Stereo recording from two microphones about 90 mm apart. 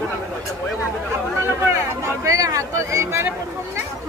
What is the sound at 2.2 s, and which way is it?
Speech, 40° right (ahead or behind).